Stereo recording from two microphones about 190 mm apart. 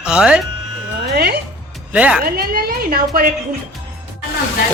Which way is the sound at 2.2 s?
50° right (ahead or behind).